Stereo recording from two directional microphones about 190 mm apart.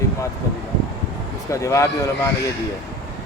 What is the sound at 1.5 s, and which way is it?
Speech, 15° left (ahead or behind).